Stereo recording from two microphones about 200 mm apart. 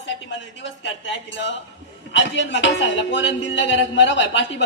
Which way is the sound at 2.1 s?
65° left (ahead or behind).